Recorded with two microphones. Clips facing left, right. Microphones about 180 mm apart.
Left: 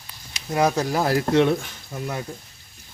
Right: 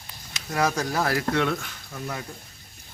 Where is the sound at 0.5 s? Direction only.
20° left (ahead or behind).